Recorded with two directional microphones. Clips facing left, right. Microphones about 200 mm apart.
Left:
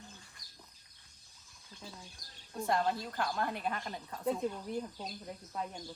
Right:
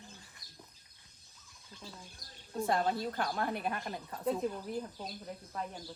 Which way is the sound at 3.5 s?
5° right (ahead or behind).